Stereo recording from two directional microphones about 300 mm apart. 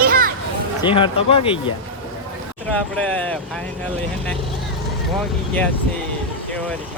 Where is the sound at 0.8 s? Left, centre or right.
Centre.